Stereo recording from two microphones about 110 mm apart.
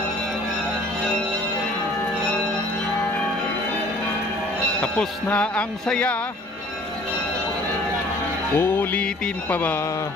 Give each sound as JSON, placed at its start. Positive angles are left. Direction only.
{"t": 4.8, "sound": "speech", "side_deg": 10}
{"t": 8.5, "sound": "speech", "side_deg": 20}